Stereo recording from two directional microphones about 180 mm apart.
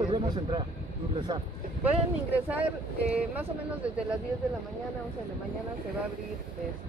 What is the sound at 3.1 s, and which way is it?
Speech, 10° right (ahead or behind).